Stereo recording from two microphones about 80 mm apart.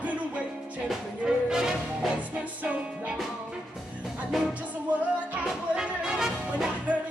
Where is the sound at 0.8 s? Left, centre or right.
Centre.